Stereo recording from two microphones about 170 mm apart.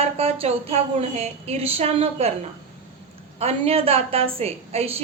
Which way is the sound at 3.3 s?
35° right (ahead or behind).